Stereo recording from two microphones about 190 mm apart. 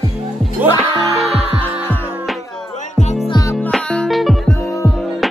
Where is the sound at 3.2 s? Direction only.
20° left (ahead or behind).